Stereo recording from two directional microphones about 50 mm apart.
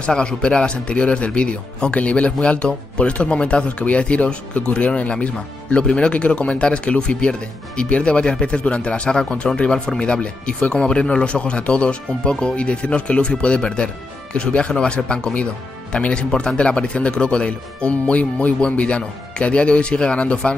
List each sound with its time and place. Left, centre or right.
0.0 s speech: centre